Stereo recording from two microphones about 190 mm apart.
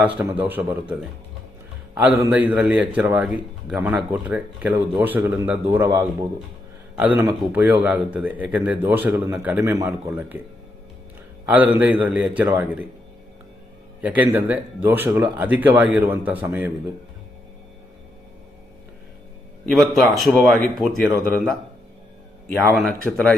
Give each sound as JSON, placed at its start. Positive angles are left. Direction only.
{"t": 0.0, "sound": "a man's voice", "side_deg": -10}
{"t": 2.0, "sound": "a man's voice", "side_deg": -10}
{"t": 11.4, "sound": "a man's voice", "side_deg": -10}
{"t": 14.0, "sound": "a man's voice", "side_deg": -10}
{"t": 19.6, "sound": "a man's voice", "side_deg": 0}
{"t": 22.7, "sound": "a man's voice", "side_deg": 0}